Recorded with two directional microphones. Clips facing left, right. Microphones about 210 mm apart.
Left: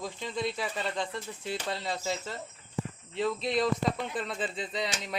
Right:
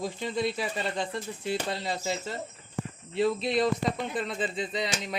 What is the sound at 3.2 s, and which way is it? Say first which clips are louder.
Speech: right 3 dB; 5° right (ahead or behind).